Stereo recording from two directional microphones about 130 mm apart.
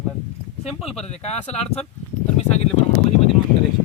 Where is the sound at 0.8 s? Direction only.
55° left (ahead or behind).